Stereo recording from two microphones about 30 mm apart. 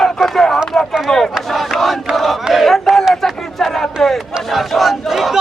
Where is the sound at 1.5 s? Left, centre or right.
Centre.